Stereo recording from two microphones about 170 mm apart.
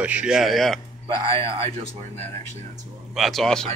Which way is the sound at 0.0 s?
5° right (ahead or behind).